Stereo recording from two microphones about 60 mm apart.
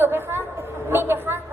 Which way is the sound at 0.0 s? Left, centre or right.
Right.